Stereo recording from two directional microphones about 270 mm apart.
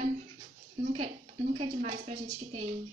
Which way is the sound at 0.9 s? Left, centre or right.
Right.